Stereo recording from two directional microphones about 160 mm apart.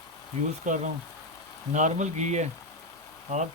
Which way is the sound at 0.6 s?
50° right (ahead or behind).